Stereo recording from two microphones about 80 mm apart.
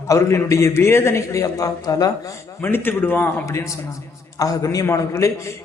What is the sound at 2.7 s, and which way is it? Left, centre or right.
Speech, left.